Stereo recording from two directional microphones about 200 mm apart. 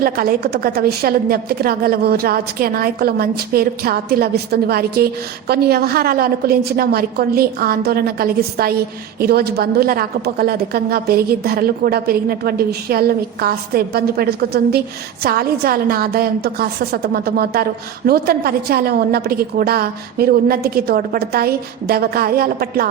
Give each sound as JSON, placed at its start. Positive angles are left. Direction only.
{"t": 0.0, "sound": "a woman's voice", "side_deg": -50}